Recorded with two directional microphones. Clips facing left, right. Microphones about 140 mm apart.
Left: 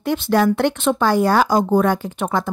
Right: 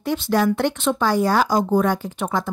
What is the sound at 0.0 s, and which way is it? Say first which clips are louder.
Speech: left 3 dB; 60° left (ahead or behind).